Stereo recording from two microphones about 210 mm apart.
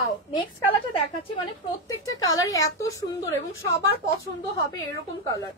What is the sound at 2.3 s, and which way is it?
A woman's voice, 15° left (ahead or behind).